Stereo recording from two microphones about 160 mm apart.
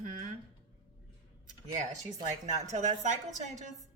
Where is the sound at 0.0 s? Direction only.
60° right (ahead or behind).